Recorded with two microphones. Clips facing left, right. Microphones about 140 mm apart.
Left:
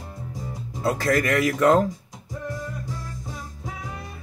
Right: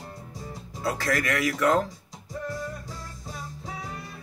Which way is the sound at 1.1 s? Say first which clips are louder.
Left 5 dB; 40° left (ahead or behind).